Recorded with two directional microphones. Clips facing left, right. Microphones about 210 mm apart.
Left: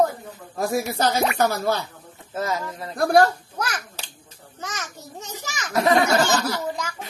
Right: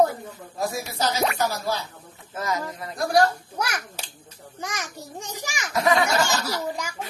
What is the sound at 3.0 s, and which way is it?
Speech, 55° left (ahead or behind).